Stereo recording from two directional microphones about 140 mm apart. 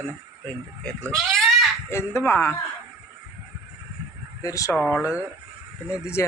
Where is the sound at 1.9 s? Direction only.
20° left (ahead or behind).